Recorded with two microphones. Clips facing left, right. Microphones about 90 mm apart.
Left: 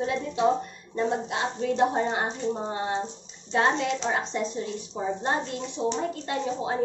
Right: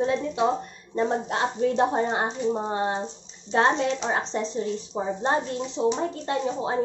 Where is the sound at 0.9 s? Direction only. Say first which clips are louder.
Right 2 dB; 40° right (ahead or behind).